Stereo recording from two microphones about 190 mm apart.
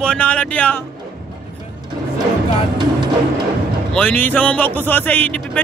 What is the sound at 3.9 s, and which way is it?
Speech, 10° left (ahead or behind).